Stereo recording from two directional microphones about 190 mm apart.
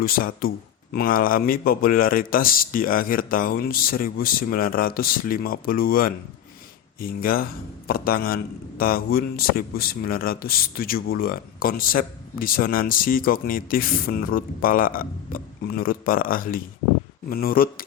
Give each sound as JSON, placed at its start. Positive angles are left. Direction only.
{"t": 0.0, "sound": "speech", "side_deg": 50}